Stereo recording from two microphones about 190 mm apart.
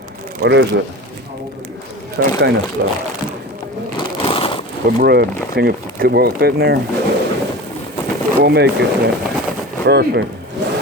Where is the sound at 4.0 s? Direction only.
30° left (ahead or behind).